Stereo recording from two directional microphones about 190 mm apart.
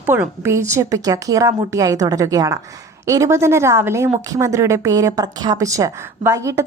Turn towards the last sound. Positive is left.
turn(degrees=-15)  # may be behind; listen again after turning